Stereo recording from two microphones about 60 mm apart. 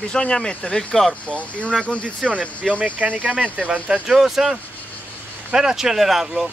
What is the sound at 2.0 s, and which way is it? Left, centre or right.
Speech, right.